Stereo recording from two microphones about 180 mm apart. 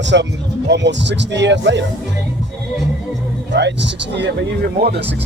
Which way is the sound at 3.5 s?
75° right (ahead or behind).